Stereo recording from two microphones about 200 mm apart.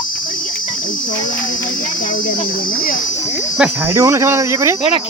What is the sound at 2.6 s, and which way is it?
Speech, 45° left (ahead or behind).